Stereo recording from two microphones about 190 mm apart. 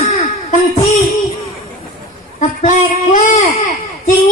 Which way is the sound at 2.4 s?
40° left (ahead or behind).